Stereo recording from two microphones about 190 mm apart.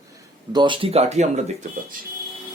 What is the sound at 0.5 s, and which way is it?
Speech, 25° right (ahead or behind).